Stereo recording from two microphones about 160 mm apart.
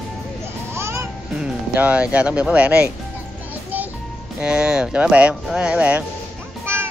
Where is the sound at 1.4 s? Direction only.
10° right (ahead or behind).